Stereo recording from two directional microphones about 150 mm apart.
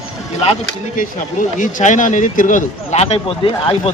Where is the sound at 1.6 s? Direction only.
55° left (ahead or behind); by 3.9 s 40° left (ahead or behind).